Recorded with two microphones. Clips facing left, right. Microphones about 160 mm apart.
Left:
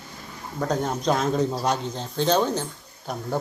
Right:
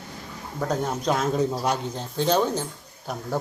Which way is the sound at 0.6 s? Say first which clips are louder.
Left 1 dB; 5° right (ahead or behind).